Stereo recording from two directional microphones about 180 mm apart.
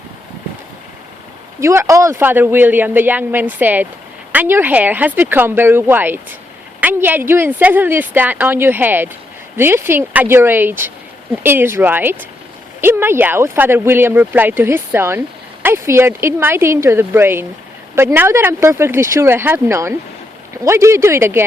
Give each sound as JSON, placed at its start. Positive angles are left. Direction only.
{"t": 1.6, "sound": "speech", "side_deg": -15}